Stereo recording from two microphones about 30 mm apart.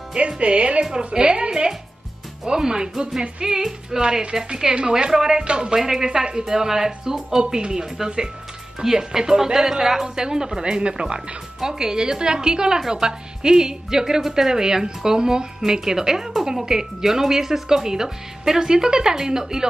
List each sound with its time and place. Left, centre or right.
0.4 s a woman's voice: right
4.9 s a woman's voice: centre
5.4 s speech: right
5.8 s speech: centre
6.1 s a woman's voice: right
6.4 s a woman's voice: centre
10.0 s a woman's voice: right
11.1 s a woman's voice: centre